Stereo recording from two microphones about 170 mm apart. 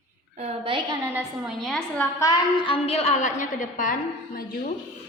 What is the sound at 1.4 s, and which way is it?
Speech, centre (ahead or behind).